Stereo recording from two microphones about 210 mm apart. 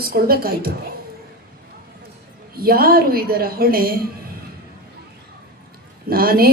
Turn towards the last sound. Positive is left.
turn(degrees=-45)  # may be behind; listen again after turning